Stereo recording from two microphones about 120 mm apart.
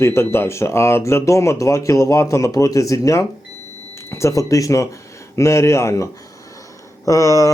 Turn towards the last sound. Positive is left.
turn(degrees=25)  # may be behind; listen again after turning